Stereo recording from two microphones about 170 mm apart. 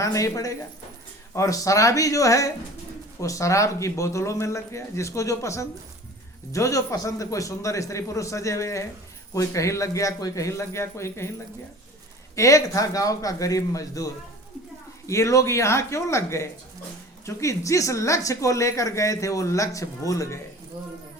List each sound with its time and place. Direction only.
0.0 s speech: 20° left (ahead or behind)
12.4 s speech: 20° left (ahead or behind)